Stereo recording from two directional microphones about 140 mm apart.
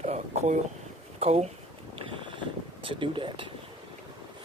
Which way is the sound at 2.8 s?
35° right (ahead or behind).